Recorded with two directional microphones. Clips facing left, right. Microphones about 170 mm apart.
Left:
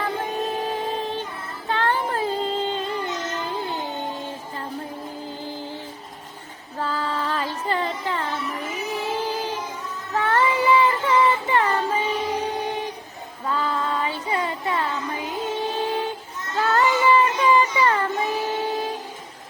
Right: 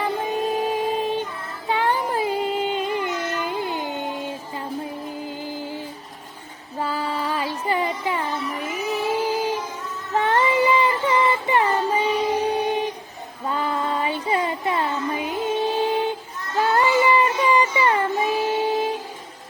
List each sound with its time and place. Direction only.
0.7 s music: 15° right (ahead or behind)
6.7 s a sound: 15° right (ahead or behind)
9.1 s child singing: 10° right (ahead or behind)
13.5 s music: 20° right (ahead or behind)
16.6 s child singing: 15° right (ahead or behind)